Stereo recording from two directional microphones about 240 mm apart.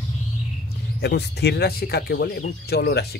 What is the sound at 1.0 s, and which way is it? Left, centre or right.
Speech, left.